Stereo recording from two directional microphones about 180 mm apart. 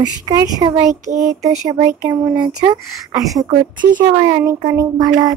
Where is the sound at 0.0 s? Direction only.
20° right (ahead or behind).